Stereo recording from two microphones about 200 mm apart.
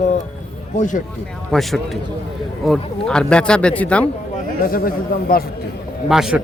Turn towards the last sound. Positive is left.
turn(degrees=-5)  # may be behind; listen again after turning